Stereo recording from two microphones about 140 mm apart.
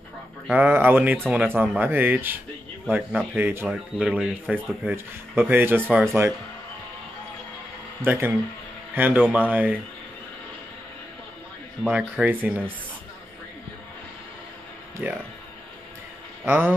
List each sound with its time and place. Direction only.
0.5 s speech: 15° right (ahead or behind)
3.3 s speech: 15° right (ahead or behind)
8.0 s speech: 15° right (ahead or behind)
11.9 s speech: 10° right (ahead or behind)
15.0 s speech: 10° right (ahead or behind)
16.4 s speech: 15° right (ahead or behind)